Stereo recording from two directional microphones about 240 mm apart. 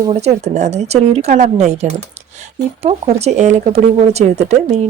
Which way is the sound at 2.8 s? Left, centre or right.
Right.